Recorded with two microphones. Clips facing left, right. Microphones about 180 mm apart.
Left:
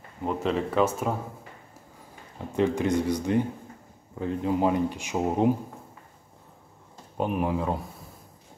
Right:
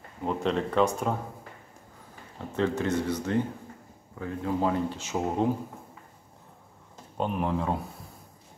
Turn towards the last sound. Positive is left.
turn(degrees=5)  # may be behind; listen again after turning